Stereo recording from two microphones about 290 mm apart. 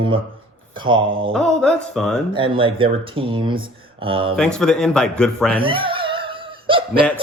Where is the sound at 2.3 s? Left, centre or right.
Centre.